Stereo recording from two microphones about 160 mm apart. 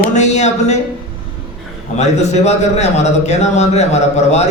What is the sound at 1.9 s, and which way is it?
A man's voice, 45° left (ahead or behind).